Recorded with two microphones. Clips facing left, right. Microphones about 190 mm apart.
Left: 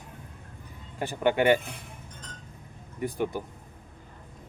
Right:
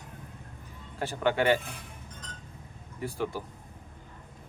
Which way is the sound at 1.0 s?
15° left (ahead or behind).